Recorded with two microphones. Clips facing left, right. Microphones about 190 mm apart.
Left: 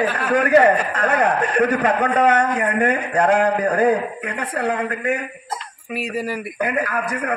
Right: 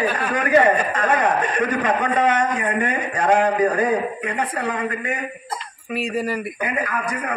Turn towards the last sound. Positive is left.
turn(degrees=60)  # may be behind; listen again after turning